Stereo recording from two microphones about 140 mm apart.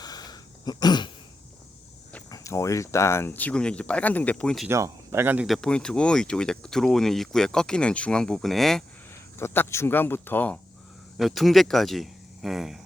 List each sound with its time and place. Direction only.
0.0 s a sound: 30° left (ahead or behind)
2.3 s speech: 20° left (ahead or behind)
4.7 s speech: 20° right (ahead or behind)
5.5 s speech: 5° left (ahead or behind)
9.4 s speech: 15° left (ahead or behind)
11.2 s speech: centre (ahead or behind)